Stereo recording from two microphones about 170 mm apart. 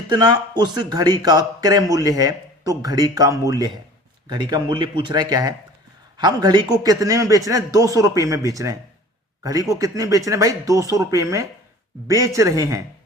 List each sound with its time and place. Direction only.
0.1 s speech: 25° right (ahead or behind)